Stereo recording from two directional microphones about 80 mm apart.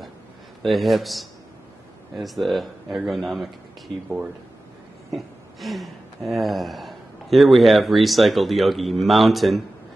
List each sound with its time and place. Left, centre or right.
0.6 s speech: centre
5.1 s speech: centre